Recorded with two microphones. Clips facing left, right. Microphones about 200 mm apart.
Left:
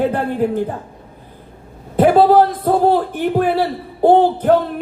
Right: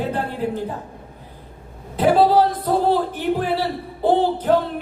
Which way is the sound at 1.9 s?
50° left (ahead or behind).